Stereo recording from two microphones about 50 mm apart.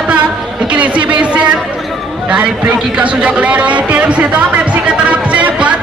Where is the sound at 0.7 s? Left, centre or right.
Right.